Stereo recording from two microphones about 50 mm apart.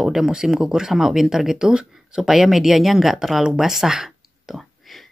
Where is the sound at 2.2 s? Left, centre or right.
Centre.